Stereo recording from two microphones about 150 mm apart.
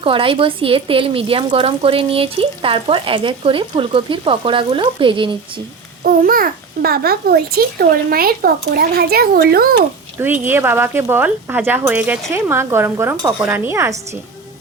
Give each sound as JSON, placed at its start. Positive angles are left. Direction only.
{"t": 0.0, "sound": "speech", "side_deg": -35}
{"t": 6.0, "sound": "a child's voice", "side_deg": -70}
{"t": 10.4, "sound": "speech", "side_deg": -15}